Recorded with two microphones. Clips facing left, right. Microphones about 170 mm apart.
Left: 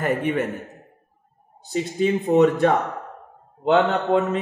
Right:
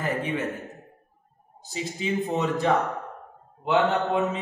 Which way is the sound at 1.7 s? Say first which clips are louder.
Left 8 dB; 65° left (ahead or behind).